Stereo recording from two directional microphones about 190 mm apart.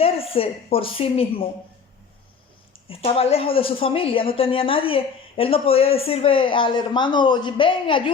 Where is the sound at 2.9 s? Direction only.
30° left (ahead or behind).